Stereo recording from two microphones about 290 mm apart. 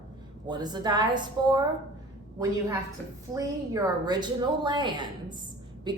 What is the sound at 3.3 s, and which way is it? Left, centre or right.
A woman's voice, centre.